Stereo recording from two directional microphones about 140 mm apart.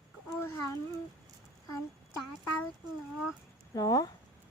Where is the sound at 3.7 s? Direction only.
25° left (ahead or behind).